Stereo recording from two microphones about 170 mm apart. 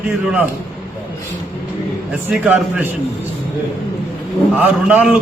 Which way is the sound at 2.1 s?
10° right (ahead or behind).